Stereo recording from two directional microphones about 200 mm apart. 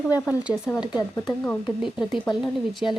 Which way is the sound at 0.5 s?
10° right (ahead or behind).